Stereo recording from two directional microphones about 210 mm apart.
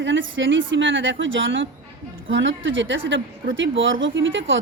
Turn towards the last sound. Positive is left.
turn(degrees=-65)  # may be behind; listen again after turning